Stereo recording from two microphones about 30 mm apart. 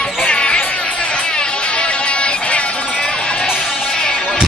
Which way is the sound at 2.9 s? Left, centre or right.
Left.